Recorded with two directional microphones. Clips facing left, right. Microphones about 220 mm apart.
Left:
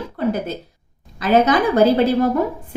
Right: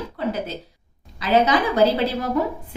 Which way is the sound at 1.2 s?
50° left (ahead or behind).